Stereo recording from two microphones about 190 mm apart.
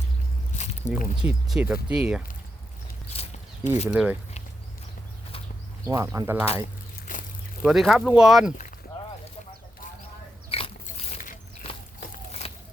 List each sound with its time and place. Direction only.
0.5 s squish: 40° left (ahead or behind)
1.2 s speech: 5° right (ahead or behind)
3.1 s a sound: 35° left (ahead or behind)
3.8 s speech: 5° right (ahead or behind)
5.8 s speech: 15° right (ahead or behind)
7.6 s speech: centre (ahead or behind)
10.5 s pig: 30° left (ahead or behind)